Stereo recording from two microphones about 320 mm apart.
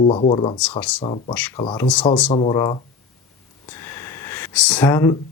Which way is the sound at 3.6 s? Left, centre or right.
Centre.